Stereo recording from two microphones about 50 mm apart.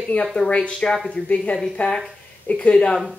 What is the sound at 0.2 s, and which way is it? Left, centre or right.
Speech, centre.